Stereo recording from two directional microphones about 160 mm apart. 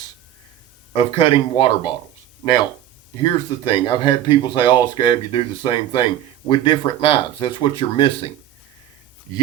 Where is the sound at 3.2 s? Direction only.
30° left (ahead or behind).